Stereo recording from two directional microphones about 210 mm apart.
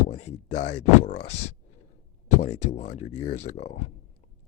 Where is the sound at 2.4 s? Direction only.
30° left (ahead or behind).